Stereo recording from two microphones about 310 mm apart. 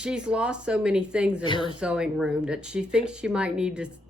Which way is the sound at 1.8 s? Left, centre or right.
Centre.